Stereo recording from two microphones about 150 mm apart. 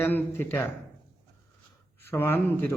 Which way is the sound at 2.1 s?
15° left (ahead or behind).